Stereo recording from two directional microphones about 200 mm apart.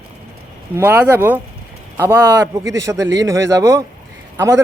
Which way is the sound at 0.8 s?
10° right (ahead or behind).